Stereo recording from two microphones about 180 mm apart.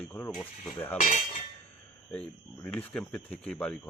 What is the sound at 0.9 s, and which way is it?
Cutlery, 50° left (ahead or behind).